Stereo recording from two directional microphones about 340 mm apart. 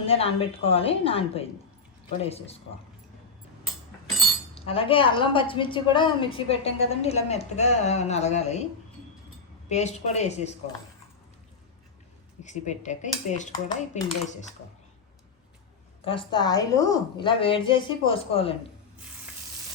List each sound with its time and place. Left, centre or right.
0.0 s a woman's voice: centre
4.5 s a woman's voice: centre
9.6 s cutlery: centre
12.4 s cutlery: left
16.0 s a woman's voice: centre